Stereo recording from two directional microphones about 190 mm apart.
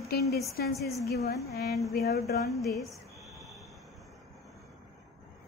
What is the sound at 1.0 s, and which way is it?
Speech, 55° left (ahead or behind).